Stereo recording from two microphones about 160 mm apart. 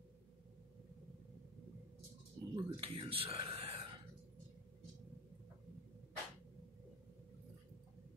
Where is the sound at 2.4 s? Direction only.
25° right (ahead or behind).